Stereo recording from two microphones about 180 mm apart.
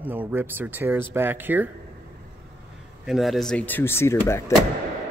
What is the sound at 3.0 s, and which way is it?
Speech, centre (ahead or behind).